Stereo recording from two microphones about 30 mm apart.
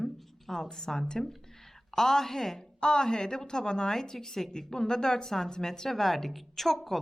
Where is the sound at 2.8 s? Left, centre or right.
Left; by 6.9 s centre.